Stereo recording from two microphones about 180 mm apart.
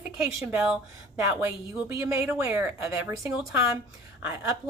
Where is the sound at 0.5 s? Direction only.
10° right (ahead or behind).